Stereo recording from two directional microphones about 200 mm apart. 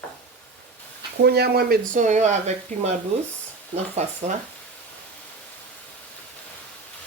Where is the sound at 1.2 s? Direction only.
55° right (ahead or behind); by 2.9 s 35° right (ahead or behind).